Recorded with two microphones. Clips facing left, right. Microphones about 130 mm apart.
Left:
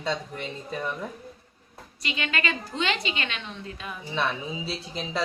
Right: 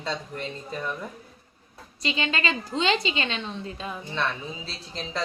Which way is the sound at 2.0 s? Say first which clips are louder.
Right 2 dB; 30° right (ahead or behind).